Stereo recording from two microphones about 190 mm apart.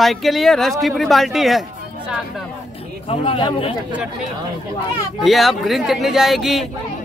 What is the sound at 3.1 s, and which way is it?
Speech, 30° left (ahead or behind).